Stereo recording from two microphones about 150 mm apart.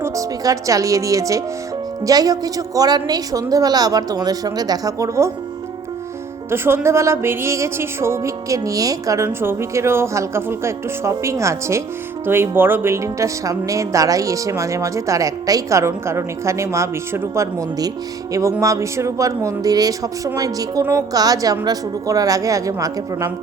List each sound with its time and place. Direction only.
0.0 s speech: 20° right (ahead or behind)
6.5 s speech: 15° right (ahead or behind)